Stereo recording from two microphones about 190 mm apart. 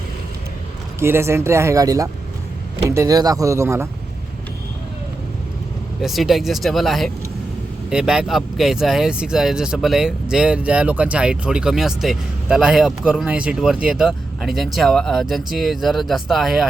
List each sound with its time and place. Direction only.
0.9 s speech: 15° right (ahead or behind)
6.0 s speech: centre (ahead or behind)